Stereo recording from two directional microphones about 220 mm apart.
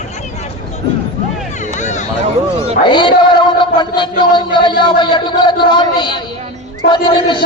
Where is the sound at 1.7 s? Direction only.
35° left (ahead or behind).